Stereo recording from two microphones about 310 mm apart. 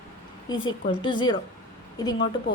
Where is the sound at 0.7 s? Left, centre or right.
Centre.